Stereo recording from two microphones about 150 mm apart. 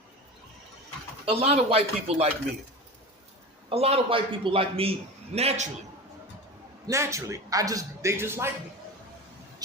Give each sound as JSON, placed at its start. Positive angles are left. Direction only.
{"t": 1.2, "sound": "a man's voice", "side_deg": -40}
{"t": 3.7, "sound": "a man's voice", "side_deg": -40}
{"t": 6.8, "sound": "speech", "side_deg": -20}